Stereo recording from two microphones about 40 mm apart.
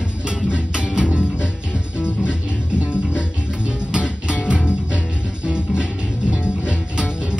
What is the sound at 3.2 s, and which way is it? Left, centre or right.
Music, right.